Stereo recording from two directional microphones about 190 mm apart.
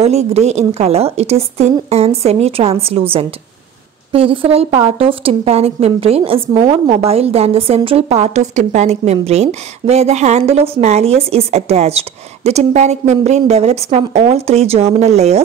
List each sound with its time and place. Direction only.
0.0 s a woman's voice: 35° right (ahead or behind)